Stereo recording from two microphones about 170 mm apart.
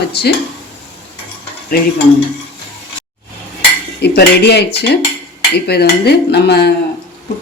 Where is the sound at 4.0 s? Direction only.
75° left (ahead or behind).